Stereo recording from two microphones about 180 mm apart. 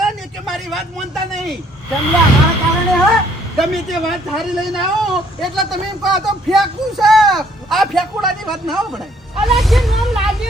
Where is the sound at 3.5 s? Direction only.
Centre (ahead or behind).